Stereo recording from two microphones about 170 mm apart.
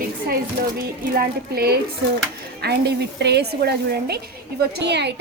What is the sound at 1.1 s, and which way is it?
Speech, 65° right (ahead or behind).